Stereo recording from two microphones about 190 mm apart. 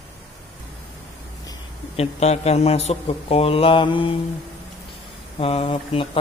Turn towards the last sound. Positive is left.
turn(degrees=30)  # may be behind; listen again after turning